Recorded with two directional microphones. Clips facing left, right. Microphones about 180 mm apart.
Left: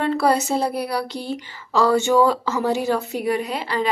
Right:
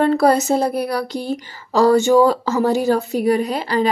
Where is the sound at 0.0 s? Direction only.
40° right (ahead or behind).